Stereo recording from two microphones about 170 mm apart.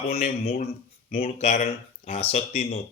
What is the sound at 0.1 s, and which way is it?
Speech, 35° left (ahead or behind).